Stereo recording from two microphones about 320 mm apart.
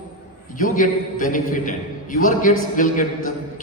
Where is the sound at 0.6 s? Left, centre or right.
Left.